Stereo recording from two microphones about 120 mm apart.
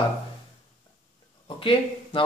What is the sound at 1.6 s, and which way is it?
Speech, 45° left (ahead or behind).